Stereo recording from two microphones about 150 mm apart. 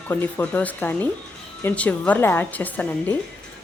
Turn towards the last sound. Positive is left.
turn(degrees=10)  # may be behind; listen again after turning